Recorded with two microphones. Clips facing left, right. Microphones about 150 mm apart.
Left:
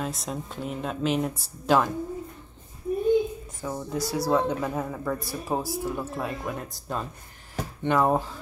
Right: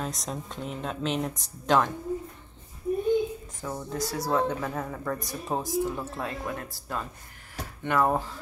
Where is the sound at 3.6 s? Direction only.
5° left (ahead or behind).